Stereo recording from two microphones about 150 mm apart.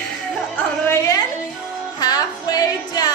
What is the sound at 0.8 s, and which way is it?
Music, 20° left (ahead or behind).